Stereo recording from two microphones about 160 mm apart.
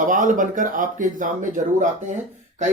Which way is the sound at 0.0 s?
55° right (ahead or behind).